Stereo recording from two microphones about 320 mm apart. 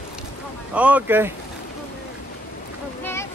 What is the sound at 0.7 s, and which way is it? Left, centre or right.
Speech, centre.